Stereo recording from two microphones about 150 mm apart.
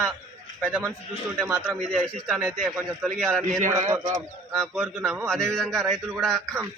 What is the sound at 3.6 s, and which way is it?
Speech, 55° right (ahead or behind).